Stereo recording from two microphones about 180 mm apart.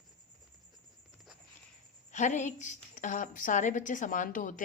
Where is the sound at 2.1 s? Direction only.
40° left (ahead or behind).